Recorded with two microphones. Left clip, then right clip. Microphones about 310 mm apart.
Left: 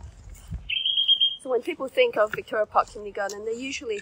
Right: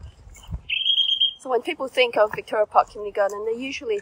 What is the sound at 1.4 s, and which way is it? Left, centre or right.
Speech, right.